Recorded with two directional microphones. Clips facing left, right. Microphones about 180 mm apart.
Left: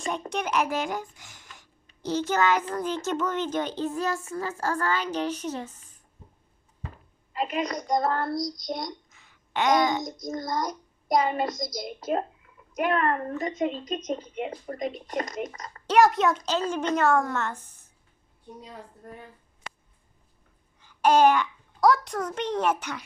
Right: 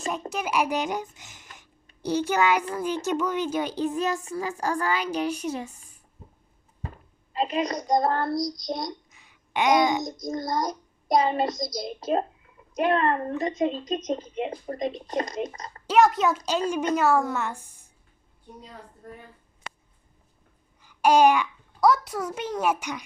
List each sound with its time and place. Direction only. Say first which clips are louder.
0.3 s a child's voice: right 1 dB; 5° right (ahead or behind)
7.3 s speech: right 2 dB; 30° right (ahead or behind)
7.9 s child singing: right 2 dB; 35° right (ahead or behind)
9.0 s a sound: right 1 dB; 15° right (ahead or behind)
10.2 s child singing: right 2 dB; 35° right (ahead or behind)
12.7 s speech: right 2 dB; 30° right (ahead or behind)
15.9 s a child's voice: even; centre (ahead or behind)
16.5 s a child's voice: right 1 dB; 10° right (ahead or behind)
20.8 s babbling: right 1 dB; 10° right (ahead or behind)
21.8 s a child's voice: even; centre (ahead or behind)